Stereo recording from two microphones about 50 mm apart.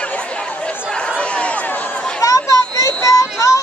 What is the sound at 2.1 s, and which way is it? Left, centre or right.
Children playing, left.